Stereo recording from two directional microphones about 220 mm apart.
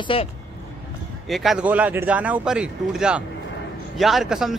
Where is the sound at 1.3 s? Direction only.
Centre (ahead or behind).